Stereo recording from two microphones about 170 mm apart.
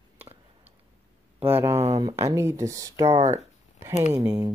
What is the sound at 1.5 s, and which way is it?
Speech, 15° right (ahead or behind).